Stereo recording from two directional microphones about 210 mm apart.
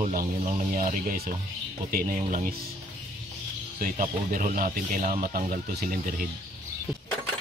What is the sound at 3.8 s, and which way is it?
Speech, 40° right (ahead or behind).